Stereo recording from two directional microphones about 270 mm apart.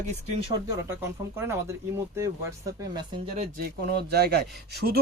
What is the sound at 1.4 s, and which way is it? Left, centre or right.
Speech, centre.